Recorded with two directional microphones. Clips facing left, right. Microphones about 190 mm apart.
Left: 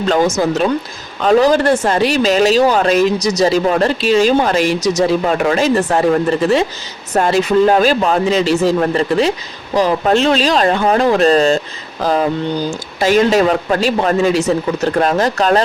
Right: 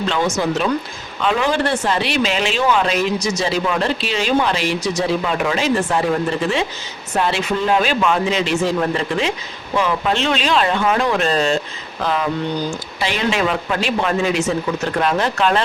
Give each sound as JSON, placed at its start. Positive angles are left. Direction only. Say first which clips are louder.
{"t": 0.1, "sound": "speech", "louder": "left 7 dB", "side_deg": 40}